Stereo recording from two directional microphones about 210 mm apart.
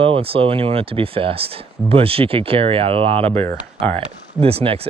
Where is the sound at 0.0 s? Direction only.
25° right (ahead or behind).